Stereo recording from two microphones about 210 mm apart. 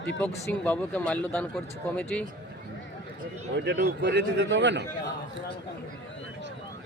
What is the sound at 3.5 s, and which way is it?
A man's voice, 55° right (ahead or behind).